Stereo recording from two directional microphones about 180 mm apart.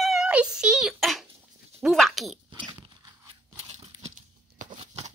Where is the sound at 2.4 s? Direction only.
25° right (ahead or behind).